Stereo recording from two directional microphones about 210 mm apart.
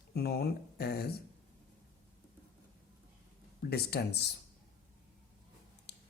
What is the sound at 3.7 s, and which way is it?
Speech, 50° left (ahead or behind).